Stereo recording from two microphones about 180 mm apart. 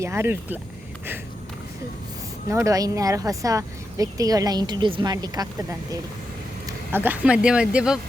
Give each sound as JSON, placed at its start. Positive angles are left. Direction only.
{"t": 0.0, "sound": "speech", "side_deg": -15}
{"t": 2.5, "sound": "speech", "side_deg": -15}
{"t": 6.7, "sound": "speech", "side_deg": -10}